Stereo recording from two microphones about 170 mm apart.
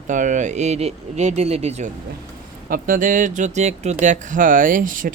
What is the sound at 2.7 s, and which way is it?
Speech, 55° right (ahead or behind).